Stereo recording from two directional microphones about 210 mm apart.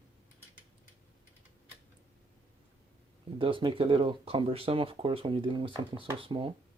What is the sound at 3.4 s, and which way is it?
Speech, 25° right (ahead or behind).